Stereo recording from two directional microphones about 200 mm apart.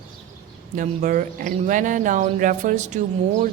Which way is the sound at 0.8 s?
40° right (ahead or behind).